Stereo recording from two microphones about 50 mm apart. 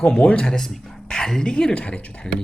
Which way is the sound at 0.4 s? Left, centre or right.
Centre.